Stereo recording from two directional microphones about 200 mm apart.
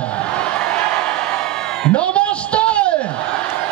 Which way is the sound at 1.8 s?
5° left (ahead or behind).